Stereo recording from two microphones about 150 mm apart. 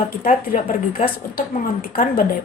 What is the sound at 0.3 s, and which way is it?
Speech, 55° left (ahead or behind).